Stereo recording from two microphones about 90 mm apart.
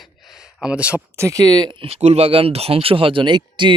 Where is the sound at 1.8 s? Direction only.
90° right; by 3.7 s 60° right (ahead or behind).